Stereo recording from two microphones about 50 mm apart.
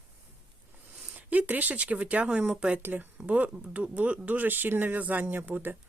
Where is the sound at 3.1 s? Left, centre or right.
Right.